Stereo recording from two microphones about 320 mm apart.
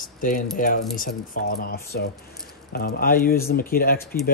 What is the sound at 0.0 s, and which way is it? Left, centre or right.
Keys jangling, left.